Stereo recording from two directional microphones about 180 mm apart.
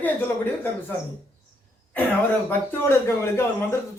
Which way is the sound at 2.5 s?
15° left (ahead or behind).